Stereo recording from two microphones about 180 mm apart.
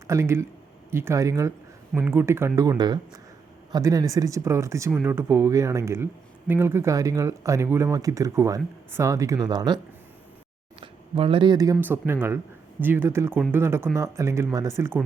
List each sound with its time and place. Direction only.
0.1 s speech: 15° right (ahead or behind)